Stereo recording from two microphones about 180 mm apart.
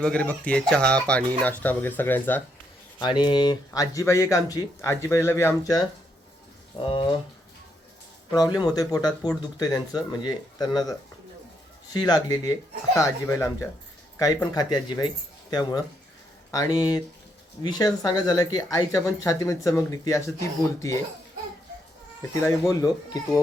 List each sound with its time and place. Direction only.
0.0 s speech: 5° left (ahead or behind)
3.0 s speech: 25° left (ahead or behind)
6.8 s speech: 30° left (ahead or behind)
8.3 s speech: 20° left (ahead or behind)
11.9 s speech: 20° left (ahead or behind)
22.7 s speech: 20° left (ahead or behind)